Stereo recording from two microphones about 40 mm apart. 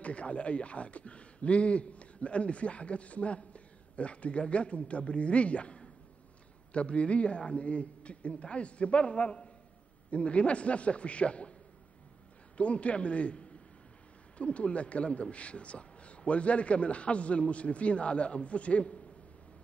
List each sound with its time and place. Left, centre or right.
0.0 s speech: left
12.5 s speech: left